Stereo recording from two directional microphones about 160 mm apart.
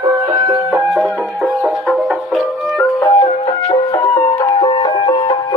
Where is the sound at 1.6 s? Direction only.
5° right (ahead or behind).